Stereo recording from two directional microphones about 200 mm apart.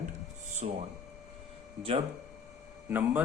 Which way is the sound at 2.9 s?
10° right (ahead or behind).